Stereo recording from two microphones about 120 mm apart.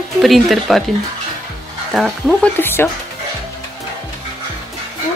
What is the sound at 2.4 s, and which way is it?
Speech, 20° left (ahead or behind).